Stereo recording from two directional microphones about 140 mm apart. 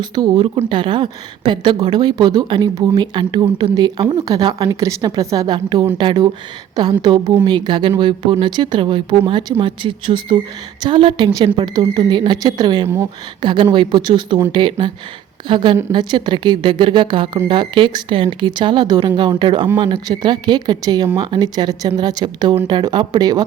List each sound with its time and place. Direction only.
0.0 s a woman's voice: 30° right (ahead or behind)